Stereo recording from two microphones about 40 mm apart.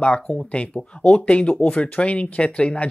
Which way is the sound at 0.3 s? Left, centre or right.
Left.